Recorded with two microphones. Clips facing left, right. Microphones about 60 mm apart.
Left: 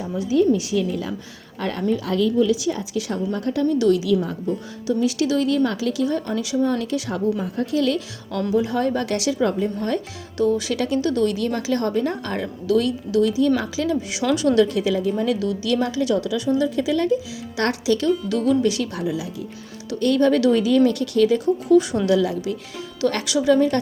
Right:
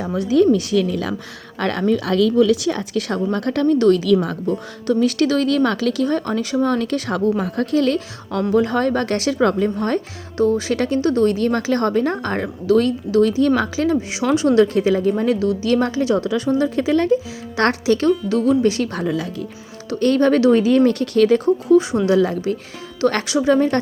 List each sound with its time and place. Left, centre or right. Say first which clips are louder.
0.0 s a woman's voice: right 4 dB; right
1.5 s a woman's voice: right 4 dB; right
3.8 s speech: right 4 dB; right
8.5 s speech: right 3 dB; right
10.3 s a woman's voice: right 3 dB; right
18.9 s speech: right 3 dB; right
19.9 s speech: right 2 dB; right
21.8 s a woman's voice: right 2 dB; right